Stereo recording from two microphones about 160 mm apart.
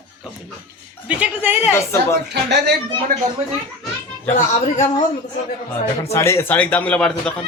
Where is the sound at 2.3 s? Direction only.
90° right.